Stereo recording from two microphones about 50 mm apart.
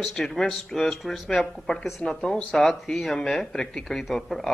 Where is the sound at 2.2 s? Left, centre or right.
Centre.